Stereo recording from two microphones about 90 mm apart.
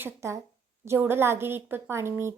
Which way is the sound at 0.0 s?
30° right (ahead or behind).